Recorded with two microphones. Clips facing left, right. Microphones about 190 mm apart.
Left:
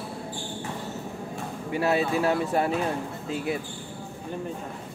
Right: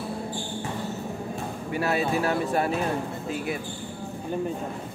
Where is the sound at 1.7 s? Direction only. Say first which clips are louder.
Left 1 dB; 20° left (ahead or behind).